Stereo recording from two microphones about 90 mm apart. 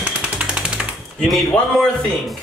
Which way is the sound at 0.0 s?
10° right (ahead or behind).